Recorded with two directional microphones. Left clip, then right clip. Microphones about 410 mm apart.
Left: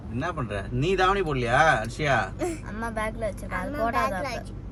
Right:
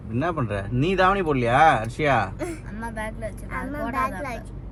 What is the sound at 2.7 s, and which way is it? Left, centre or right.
Speech, left.